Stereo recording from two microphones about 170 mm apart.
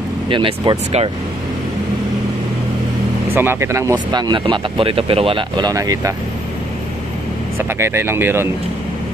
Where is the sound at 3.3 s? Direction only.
15° right (ahead or behind).